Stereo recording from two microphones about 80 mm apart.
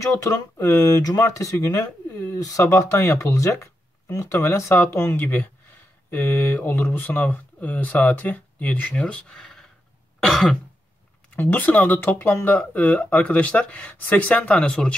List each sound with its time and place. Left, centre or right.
0.0 s speech: left; by 9.7 s centre
10.2 s cough: centre
11.2 s speech: centre